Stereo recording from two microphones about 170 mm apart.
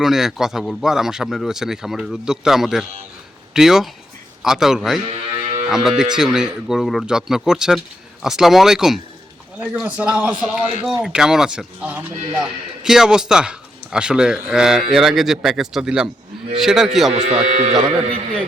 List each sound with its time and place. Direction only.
0.0 s speech: centre (ahead or behind)
5.0 s a sound: 40° right (ahead or behind)
5.6 s speech: 5° right (ahead or behind)
17.4 s speech: 40° right (ahead or behind)